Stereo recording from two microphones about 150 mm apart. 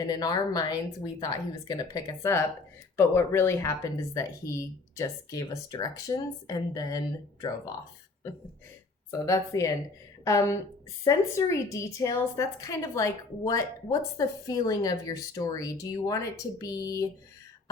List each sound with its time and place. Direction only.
0.1 s speech: 25° left (ahead or behind)
9.0 s speech: 20° left (ahead or behind)